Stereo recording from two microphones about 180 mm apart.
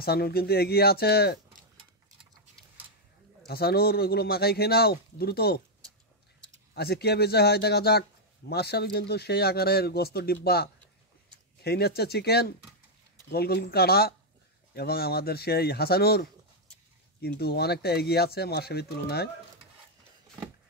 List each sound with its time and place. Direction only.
0.0 s speech: 60° left (ahead or behind)
3.4 s speech: 60° left (ahead or behind)